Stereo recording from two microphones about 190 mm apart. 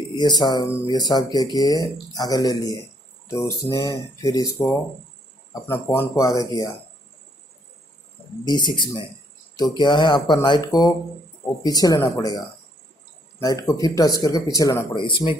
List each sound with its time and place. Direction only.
0.1 s speech: 25° left (ahead or behind)
8.5 s speech: 25° left (ahead or behind)